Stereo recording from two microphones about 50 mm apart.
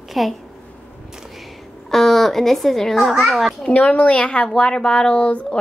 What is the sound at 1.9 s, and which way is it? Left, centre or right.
A woman's voice, centre.